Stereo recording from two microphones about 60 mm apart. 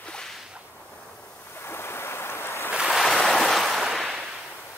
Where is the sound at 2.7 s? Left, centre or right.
Centre.